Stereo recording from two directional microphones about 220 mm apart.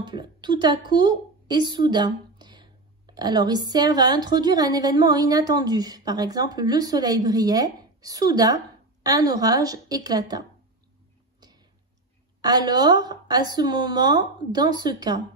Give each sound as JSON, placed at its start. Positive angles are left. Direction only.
{"t": 0.0, "sound": "a woman's voice", "side_deg": -20}
{"t": 12.4, "sound": "a woman's voice", "side_deg": -20}